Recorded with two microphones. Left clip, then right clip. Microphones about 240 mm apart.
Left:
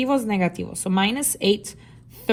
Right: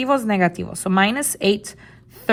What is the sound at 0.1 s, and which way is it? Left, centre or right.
A woman's voice, right.